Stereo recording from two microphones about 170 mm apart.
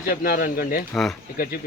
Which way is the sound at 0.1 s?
60° left (ahead or behind).